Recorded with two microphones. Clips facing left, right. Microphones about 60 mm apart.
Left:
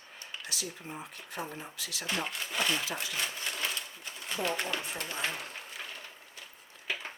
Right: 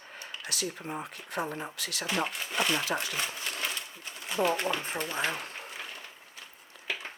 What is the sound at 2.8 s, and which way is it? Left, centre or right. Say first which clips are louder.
Speech: right 5 dB; right.